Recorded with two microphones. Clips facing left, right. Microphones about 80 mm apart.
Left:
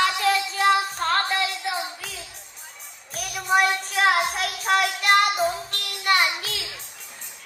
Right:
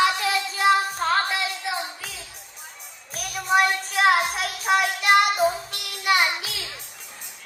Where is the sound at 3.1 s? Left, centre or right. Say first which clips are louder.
Even; centre.